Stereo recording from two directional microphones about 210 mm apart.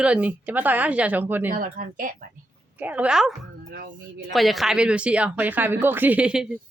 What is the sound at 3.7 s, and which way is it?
Speech, 45° right (ahead or behind).